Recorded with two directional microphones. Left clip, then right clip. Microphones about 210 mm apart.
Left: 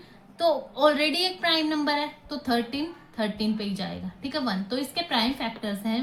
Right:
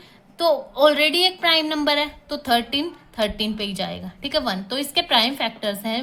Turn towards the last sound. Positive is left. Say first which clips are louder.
# right 6 dB
turn(degrees=-40)  # may be behind; listen again after turning